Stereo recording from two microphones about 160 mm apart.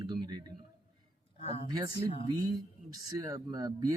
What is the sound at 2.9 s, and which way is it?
Speech, 20° right (ahead or behind).